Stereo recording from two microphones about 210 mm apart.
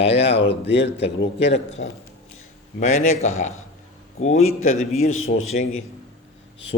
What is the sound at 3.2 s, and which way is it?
A man's voice, 35° left (ahead or behind).